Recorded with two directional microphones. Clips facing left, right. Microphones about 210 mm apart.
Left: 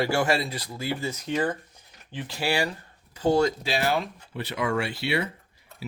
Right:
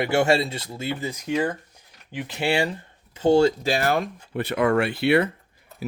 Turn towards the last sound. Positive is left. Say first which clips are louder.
# right 6 dB
turn(degrees=-55)  # may be behind; listen again after turning